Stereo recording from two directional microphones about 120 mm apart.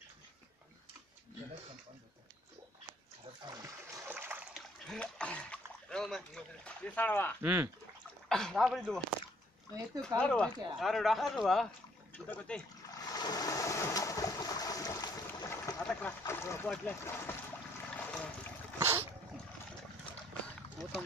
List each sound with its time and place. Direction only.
3.5 s splash: 30° right (ahead or behind)
4.1 s splash: 15° right (ahead or behind)
4.6 s splash: 5° left (ahead or behind)
7.4 s speech: 20° right (ahead or behind)
8.3 s a man's voice: 5° left (ahead or behind)
10.0 s a man's voice: 10° left (ahead or behind)
12.8 s a sound: 30° left (ahead or behind)
15.8 s speech: 10° left (ahead or behind)
16.3 s speech: 20° left (ahead or behind)
17.9 s toilet flush: 10° left (ahead or behind)
18.8 s dog: 20° right (ahead or behind)